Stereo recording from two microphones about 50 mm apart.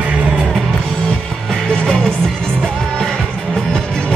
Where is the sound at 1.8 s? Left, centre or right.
Centre.